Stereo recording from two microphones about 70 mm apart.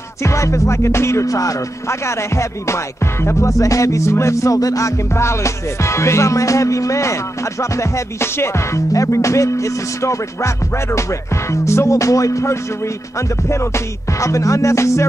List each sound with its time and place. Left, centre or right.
0.2 s music: left